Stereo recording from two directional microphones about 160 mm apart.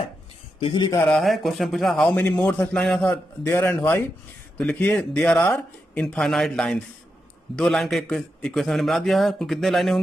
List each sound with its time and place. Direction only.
0.6 s speech: 30° left (ahead or behind)
1.0 s a man's voice: centre (ahead or behind)